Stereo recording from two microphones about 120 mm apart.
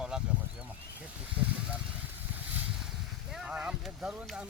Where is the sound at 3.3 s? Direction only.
5° right (ahead or behind).